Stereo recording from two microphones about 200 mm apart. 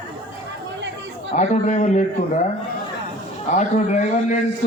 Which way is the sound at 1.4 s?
35° left (ahead or behind).